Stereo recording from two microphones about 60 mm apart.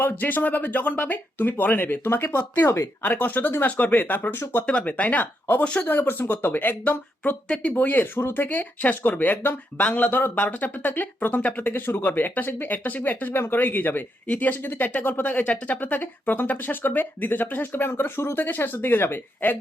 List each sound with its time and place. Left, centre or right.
0.0 s speech: left
3.0 s speech: left
5.9 s speech: left
7.4 s speech: centre
7.7 s speech: left